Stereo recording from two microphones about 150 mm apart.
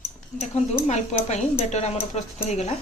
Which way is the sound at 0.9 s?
50° left (ahead or behind).